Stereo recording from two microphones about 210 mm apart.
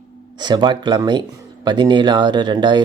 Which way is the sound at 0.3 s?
20° right (ahead or behind).